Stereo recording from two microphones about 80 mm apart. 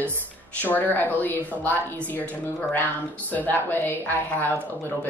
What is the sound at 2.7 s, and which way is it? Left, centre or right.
Speech, left.